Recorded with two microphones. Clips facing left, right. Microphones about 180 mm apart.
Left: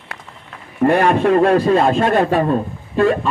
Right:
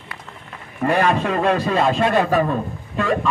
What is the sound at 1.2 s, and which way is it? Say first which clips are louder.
Speech: left 7 dB; 45° left (ahead or behind).